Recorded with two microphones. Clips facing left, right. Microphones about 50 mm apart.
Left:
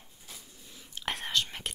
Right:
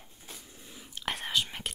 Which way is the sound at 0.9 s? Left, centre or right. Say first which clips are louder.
Even; centre.